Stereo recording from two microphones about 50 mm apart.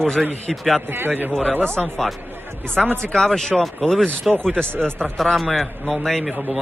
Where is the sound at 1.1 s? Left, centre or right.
Right.